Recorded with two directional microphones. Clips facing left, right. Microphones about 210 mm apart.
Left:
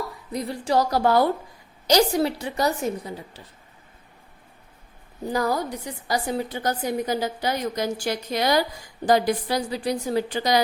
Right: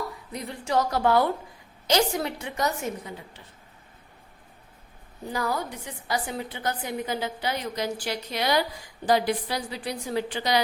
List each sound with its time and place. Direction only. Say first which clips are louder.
0.3 s a woman's voice: left 4 dB; 35° left (ahead or behind)
5.3 s a woman's voice: left 5 dB; 40° left (ahead or behind)